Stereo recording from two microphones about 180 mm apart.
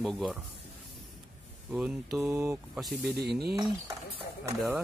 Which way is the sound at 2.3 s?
15° right (ahead or behind).